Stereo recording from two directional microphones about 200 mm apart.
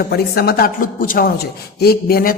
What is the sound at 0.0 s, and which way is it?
Speech, 50° left (ahead or behind).